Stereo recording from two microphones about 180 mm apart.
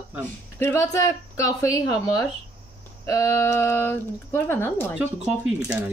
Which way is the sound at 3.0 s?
15° left (ahead or behind).